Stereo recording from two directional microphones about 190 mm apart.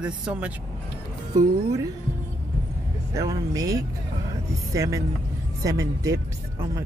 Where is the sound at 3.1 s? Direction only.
20° right (ahead or behind).